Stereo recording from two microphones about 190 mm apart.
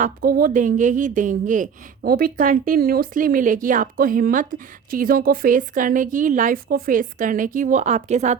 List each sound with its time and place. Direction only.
0.0 s a woman's voice: 45° right (ahead or behind)